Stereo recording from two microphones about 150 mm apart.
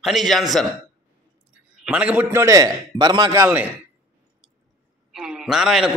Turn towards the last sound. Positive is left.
turn(degrees=-5)  # may be behind; listen again after turning